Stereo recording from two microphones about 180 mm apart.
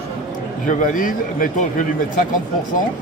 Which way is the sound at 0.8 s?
50° left (ahead or behind).